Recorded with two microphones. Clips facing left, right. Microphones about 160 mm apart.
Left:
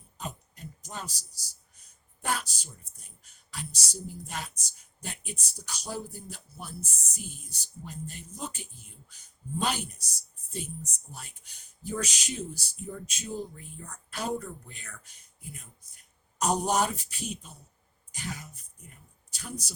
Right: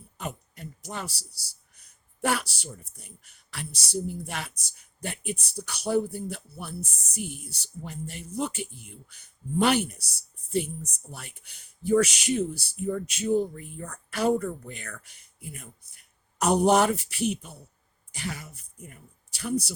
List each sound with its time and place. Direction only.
0.2 s a man's voice: 70° right (ahead or behind)